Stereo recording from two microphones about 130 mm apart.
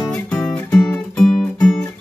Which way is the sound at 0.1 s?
10° left (ahead or behind).